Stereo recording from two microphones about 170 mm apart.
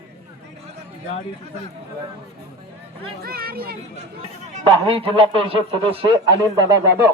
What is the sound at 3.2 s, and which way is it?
Speech, 60° right (ahead or behind).